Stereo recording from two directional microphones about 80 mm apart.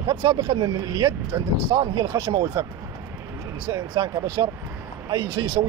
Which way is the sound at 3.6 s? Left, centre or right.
Right.